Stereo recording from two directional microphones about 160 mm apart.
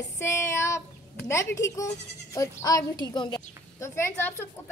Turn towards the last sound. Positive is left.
turn(degrees=15)  # may be behind; listen again after turning